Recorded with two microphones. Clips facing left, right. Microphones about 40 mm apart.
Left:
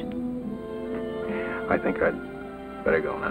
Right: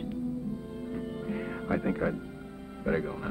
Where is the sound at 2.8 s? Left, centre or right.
Left.